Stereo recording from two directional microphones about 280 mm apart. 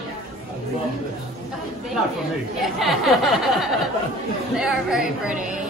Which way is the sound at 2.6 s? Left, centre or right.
Centre.